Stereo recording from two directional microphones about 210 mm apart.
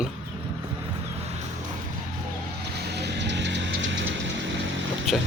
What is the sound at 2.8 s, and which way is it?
Music, 55° right (ahead or behind).